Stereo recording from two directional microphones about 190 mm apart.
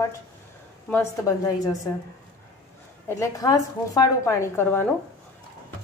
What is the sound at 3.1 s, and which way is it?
A woman's voice, 15° left (ahead or behind).